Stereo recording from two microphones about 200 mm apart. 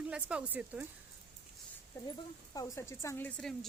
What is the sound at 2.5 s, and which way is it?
A woman's voice, 15° left (ahead or behind).